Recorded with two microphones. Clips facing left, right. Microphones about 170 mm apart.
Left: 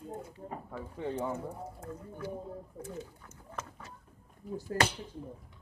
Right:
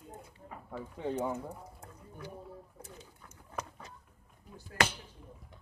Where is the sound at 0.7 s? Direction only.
10° right (ahead or behind).